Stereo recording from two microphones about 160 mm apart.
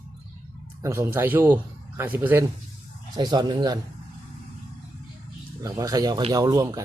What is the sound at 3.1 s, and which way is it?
Speech, 25° right (ahead or behind).